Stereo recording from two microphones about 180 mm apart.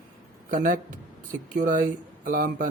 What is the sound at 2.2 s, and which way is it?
Speech, 50° right (ahead or behind).